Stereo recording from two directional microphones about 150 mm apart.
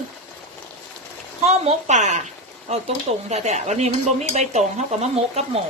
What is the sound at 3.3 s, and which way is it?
Speech, 50° right (ahead or behind).